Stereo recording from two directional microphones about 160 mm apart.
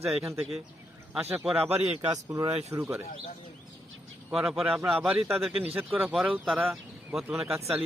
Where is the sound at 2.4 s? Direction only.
10° right (ahead or behind).